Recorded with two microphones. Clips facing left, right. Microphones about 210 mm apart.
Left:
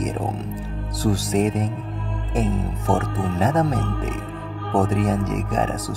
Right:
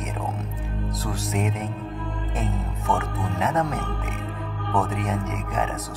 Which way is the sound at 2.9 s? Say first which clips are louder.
Left 4 dB; 40° left (ahead or behind).